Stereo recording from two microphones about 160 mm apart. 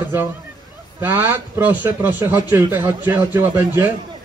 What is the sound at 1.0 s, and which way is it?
A man's voice, 15° right (ahead or behind).